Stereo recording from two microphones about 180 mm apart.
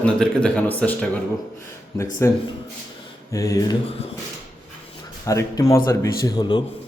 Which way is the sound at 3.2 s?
20° left (ahead or behind).